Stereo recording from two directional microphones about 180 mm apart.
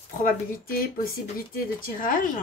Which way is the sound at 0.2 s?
50° left (ahead or behind).